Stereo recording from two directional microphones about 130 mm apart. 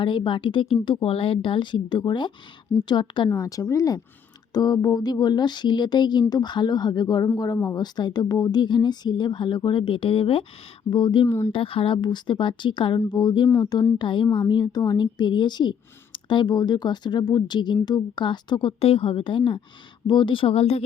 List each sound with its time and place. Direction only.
0.0 s a woman's voice: 40° left (ahead or behind)
11.3 s speech: 20° left (ahead or behind)
11.5 s a woman's voice: 45° left (ahead or behind)